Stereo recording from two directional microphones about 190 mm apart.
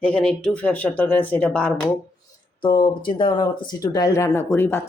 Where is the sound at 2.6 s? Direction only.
25° left (ahead or behind).